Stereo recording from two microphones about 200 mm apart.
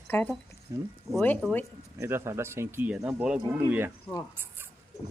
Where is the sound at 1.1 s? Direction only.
5° left (ahead or behind).